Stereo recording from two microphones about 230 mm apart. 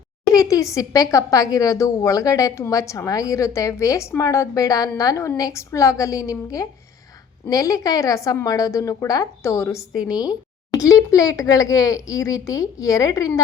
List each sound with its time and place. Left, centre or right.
0.3 s a woman's voice: centre